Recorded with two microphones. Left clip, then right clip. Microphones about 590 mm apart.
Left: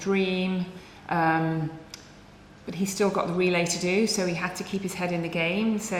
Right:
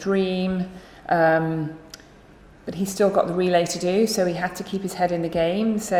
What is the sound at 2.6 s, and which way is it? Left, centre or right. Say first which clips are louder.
A woman's voice: right 5 dB; right.